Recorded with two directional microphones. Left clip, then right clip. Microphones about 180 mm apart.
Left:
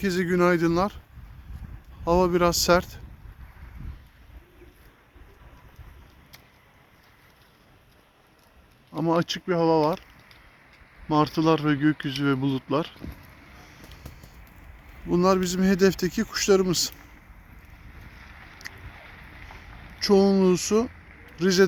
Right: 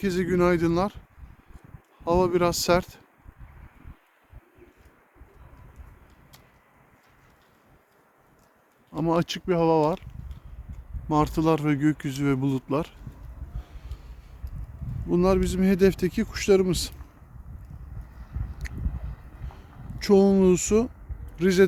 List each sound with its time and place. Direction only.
0.0 s speech: 10° right (ahead or behind)
2.0 s speech: 5° right (ahead or behind)
8.9 s speech: 15° right (ahead or behind)
11.1 s speech: 15° right (ahead or behind)
15.1 s speech: 10° right (ahead or behind)
20.0 s speech: 20° right (ahead or behind)